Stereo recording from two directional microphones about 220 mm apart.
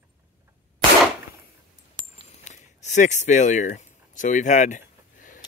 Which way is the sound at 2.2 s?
30° left (ahead or behind).